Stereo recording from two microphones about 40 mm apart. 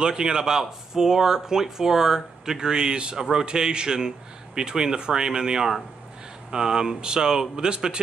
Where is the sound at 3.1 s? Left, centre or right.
Centre.